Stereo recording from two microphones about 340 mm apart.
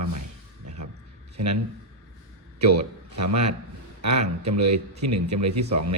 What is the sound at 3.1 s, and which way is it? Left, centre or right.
Speech, right.